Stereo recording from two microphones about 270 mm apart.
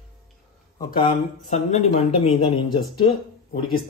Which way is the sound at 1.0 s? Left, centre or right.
Left.